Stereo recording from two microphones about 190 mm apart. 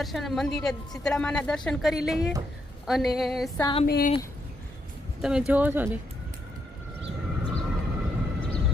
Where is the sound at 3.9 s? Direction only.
55° left (ahead or behind).